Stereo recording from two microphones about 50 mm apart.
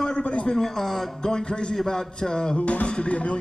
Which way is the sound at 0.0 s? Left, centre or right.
Left.